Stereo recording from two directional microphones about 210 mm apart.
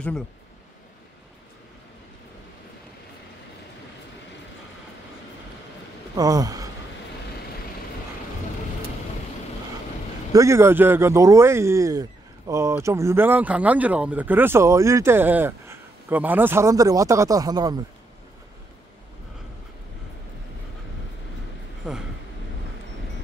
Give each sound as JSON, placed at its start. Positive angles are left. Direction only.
{"t": 6.1, "sound": "speech", "side_deg": -15}
{"t": 10.3, "sound": "speech", "side_deg": -15}
{"t": 21.8, "sound": "speech", "side_deg": -5}